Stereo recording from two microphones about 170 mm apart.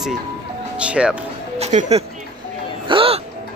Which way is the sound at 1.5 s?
40° right (ahead or behind).